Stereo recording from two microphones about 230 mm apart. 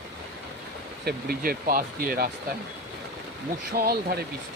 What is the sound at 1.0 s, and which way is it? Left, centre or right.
Speech, right.